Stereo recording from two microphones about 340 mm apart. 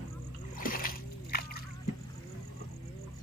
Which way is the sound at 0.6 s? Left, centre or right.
Left.